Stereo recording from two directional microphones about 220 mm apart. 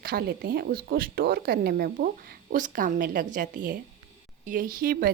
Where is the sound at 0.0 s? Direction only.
45° right (ahead or behind).